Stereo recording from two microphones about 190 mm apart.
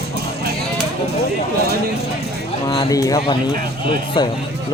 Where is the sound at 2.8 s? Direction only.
20° left (ahead or behind).